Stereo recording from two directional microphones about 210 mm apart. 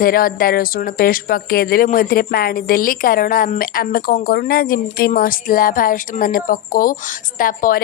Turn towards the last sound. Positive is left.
turn(degrees=40)  # may be behind; listen again after turning